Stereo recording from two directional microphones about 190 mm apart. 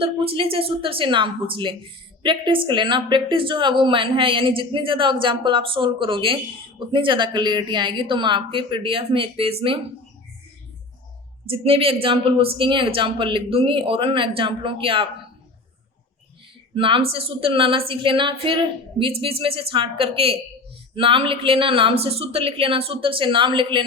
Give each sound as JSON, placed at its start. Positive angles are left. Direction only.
{"t": 0.0, "sound": "a woman's voice", "side_deg": -30}
{"t": 11.4, "sound": "a woman's voice", "side_deg": -30}
{"t": 16.7, "sound": "a woman's voice", "side_deg": -30}